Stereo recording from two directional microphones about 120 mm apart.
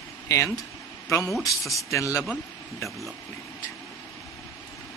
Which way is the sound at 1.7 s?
25° left (ahead or behind).